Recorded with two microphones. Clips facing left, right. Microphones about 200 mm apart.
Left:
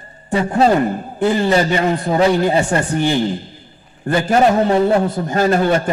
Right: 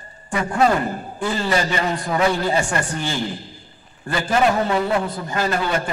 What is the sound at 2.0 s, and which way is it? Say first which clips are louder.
Speech: left 5 dB; 35° left (ahead or behind).